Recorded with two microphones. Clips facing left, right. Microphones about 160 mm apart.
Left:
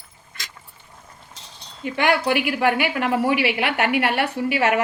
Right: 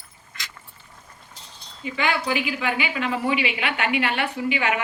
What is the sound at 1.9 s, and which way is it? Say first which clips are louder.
A woman's voice: left 4 dB; 70° left (ahead or behind).